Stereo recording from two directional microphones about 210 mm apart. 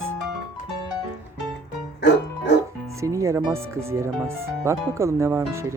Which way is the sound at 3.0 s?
15° right (ahead or behind).